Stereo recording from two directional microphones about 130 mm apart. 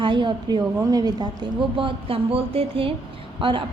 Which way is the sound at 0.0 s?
40° right (ahead or behind).